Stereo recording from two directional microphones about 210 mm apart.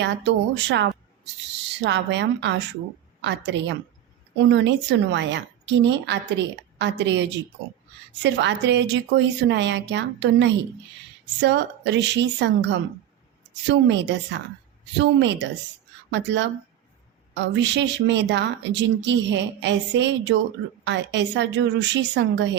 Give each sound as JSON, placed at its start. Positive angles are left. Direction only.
{"t": 0.0, "sound": "a woman's voice", "side_deg": -55}